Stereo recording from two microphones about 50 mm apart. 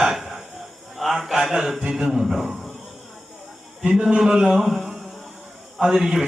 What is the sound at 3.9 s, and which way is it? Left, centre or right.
Mantra, centre.